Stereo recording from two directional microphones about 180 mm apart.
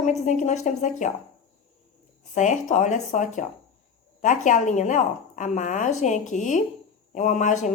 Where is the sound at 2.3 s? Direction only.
40° left (ahead or behind).